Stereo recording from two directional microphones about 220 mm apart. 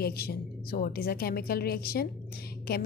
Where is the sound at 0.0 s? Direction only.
45° left (ahead or behind).